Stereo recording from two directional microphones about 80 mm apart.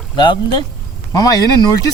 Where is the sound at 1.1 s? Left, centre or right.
Left.